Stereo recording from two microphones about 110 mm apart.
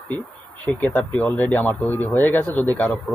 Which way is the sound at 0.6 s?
15° left (ahead or behind).